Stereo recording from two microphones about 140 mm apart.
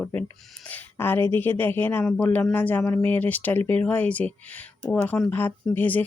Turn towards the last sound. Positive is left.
turn(degrees=10)  # may be behind; listen again after turning